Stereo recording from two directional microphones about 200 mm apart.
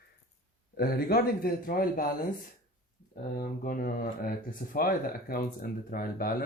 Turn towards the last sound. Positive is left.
turn(degrees=45)  # may be behind; listen again after turning